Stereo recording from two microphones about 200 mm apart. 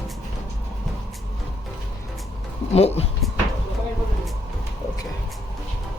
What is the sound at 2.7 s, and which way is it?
Speech, 30° left (ahead or behind).